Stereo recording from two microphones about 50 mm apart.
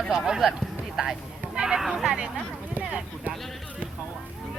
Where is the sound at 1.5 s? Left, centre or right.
Centre.